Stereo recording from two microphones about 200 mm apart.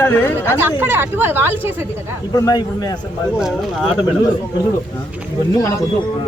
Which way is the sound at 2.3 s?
20° left (ahead or behind).